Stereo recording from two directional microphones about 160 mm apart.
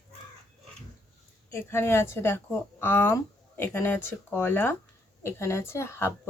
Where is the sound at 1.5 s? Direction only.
15° left (ahead or behind).